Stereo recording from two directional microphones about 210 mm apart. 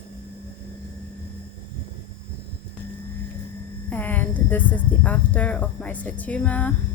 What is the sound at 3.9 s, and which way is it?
A woman's voice, 10° left (ahead or behind).